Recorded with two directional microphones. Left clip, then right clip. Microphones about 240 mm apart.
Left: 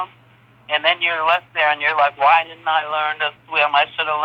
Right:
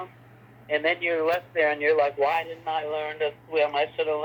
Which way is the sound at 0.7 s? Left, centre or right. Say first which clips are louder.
Left 7 dB; centre.